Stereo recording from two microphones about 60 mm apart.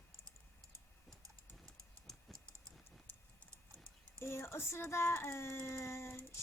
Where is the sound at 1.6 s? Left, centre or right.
Centre.